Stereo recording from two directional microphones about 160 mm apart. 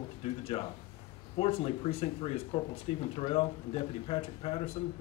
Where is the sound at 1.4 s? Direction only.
35° left (ahead or behind).